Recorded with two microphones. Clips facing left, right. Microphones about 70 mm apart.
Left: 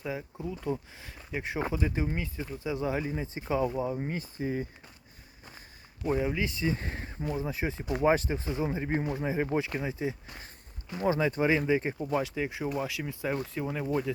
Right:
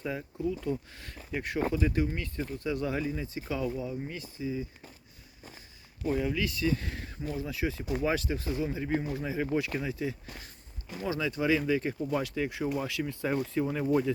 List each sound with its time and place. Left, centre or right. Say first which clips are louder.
0.0 s speech: right 3 dB; centre; by 3.7 s left
3.7 s speech: left 3 dB; left
4.4 s speech: left 1 dB; left
6.1 s speech: left 1 dB; left
11.0 s speech: left 4 dB; left
12.1 s speech: left 2 dB; centre